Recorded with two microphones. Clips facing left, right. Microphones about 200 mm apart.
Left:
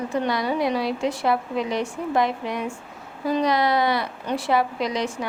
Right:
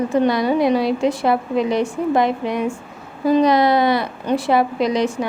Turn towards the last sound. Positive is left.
turn(degrees=-20)  # may be behind; listen again after turning